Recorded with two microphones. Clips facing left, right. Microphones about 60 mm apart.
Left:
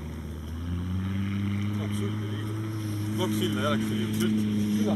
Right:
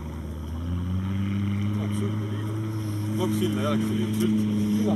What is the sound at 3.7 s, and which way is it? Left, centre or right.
Speech, centre.